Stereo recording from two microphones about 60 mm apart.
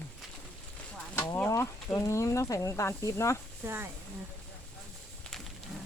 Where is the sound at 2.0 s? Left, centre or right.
Left.